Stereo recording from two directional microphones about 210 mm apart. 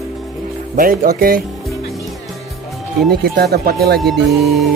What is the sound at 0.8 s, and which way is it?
Music, 45° right (ahead or behind).